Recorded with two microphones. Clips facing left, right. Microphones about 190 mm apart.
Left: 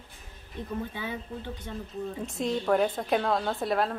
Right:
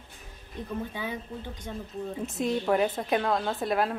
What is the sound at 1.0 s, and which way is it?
Speech, 15° right (ahead or behind).